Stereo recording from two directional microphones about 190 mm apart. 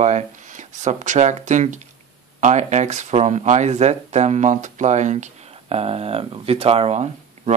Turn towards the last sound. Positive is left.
turn(degrees=-35)  # may be behind; listen again after turning